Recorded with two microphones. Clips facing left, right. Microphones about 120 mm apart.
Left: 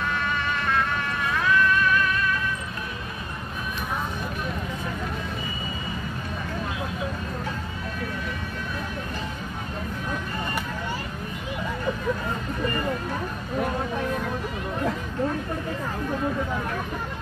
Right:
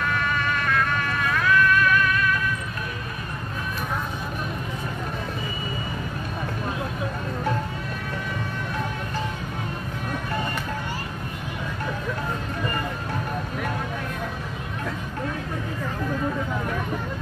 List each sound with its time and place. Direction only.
0.7 s music: 25° left (ahead or behind)